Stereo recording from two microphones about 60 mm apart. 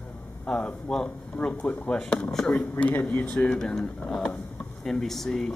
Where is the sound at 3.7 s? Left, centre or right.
Centre.